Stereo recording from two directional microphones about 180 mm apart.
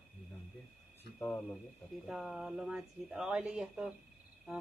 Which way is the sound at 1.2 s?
10° left (ahead or behind).